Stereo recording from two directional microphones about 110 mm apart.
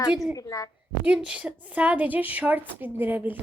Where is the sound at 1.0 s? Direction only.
10° right (ahead or behind).